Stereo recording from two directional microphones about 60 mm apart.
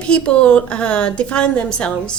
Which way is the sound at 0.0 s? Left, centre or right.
Centre.